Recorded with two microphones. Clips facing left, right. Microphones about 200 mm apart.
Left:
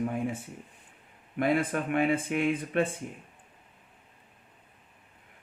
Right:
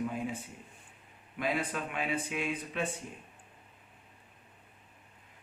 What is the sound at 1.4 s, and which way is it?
Speech, 55° left (ahead or behind).